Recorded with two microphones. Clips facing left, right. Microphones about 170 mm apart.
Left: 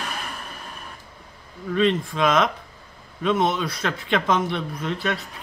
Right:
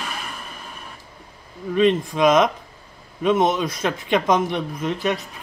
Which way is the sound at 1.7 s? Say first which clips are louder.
Right 3 dB; 15° right (ahead or behind).